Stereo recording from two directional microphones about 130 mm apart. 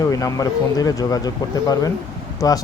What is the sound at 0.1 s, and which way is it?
Speech, 25° left (ahead or behind).